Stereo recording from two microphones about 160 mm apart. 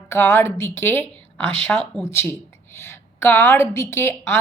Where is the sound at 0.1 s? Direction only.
15° left (ahead or behind).